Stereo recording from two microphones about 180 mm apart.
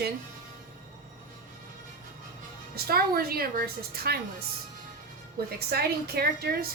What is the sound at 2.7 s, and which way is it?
A woman's voice, 60° right (ahead or behind).